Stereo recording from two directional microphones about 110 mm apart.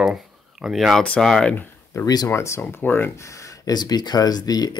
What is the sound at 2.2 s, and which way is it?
Speech, 25° left (ahead or behind).